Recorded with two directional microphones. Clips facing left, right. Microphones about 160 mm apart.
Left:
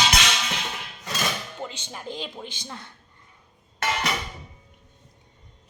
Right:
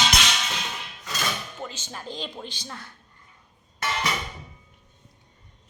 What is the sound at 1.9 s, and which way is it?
Speech, 15° left (ahead or behind).